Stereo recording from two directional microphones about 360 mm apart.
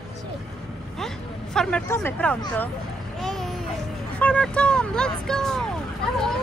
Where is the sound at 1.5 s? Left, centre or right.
Centre.